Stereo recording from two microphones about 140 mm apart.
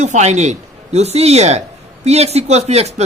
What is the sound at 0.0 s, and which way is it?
A woman's voice, 55° right (ahead or behind).